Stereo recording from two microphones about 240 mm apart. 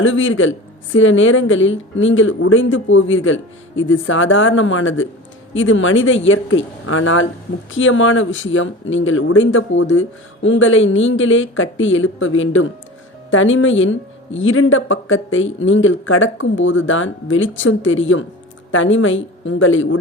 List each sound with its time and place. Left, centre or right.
0.0 s a woman's voice: left